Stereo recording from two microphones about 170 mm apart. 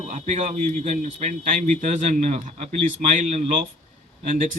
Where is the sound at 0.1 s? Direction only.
45° right (ahead or behind).